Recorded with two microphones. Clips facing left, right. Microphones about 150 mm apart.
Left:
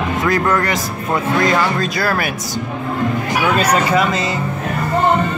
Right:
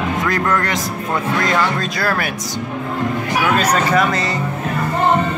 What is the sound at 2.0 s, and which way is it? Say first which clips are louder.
Speech: even; 5° left (ahead or behind).